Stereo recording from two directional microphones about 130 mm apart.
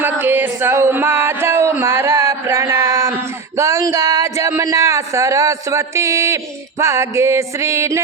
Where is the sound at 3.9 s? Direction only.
25° right (ahead or behind).